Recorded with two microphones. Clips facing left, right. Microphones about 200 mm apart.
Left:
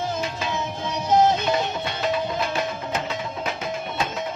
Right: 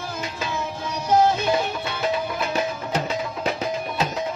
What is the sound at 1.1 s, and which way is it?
Music, 20° left (ahead or behind).